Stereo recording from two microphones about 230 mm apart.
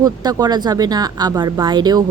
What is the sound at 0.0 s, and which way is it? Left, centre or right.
A woman's voice, centre.